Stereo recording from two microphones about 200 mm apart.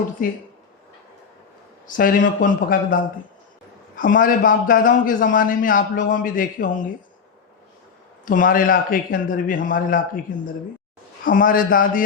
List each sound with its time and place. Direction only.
0.2 s a man's voice: 40° left (ahead or behind)
2.0 s a man's voice: 45° left (ahead or behind)
8.2 s a man's voice: 40° left (ahead or behind)
11.3 s a man's voice: 45° left (ahead or behind)